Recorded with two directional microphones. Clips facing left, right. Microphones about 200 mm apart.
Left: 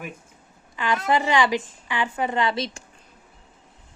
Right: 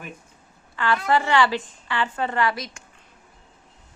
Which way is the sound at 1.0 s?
15° left (ahead or behind).